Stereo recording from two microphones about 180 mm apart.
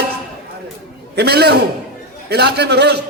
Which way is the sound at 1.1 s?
65° right (ahead or behind).